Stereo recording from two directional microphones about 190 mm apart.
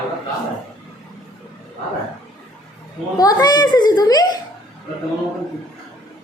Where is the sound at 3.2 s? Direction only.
20° left (ahead or behind).